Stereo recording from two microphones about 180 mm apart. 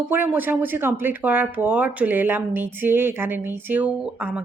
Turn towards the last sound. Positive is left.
turn(degrees=-10)  # may be behind; listen again after turning